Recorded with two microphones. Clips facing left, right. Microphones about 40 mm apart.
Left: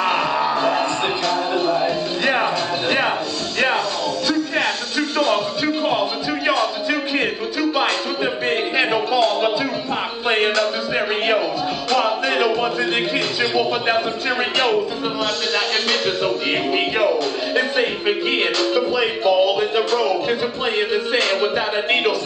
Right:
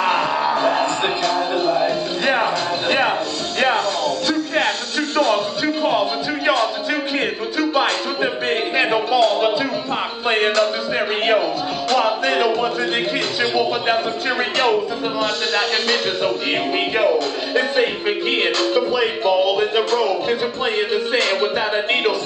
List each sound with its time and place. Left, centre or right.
0.0 s music: centre
5.1 s music: centre
8.5 s a sound: centre
10.2 s music: centre
11.9 s music: centre
15.9 s a man's voice: centre
21.1 s music: centre